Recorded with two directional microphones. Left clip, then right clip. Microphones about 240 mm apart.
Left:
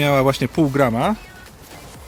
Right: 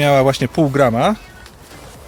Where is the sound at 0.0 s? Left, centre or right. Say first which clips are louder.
Right 4 dB; centre.